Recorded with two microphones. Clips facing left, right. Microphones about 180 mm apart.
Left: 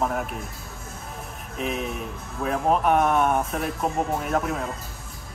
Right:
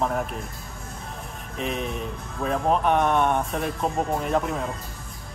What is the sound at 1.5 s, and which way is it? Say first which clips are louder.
Speech: even; 5° left (ahead or behind).